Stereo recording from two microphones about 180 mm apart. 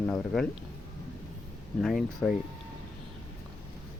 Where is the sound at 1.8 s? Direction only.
Centre (ahead or behind).